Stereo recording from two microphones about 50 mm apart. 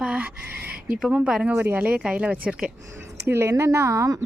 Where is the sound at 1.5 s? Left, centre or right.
Right.